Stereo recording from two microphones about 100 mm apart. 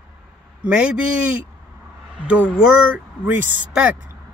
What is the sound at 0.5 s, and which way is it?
Speech, 10° right (ahead or behind).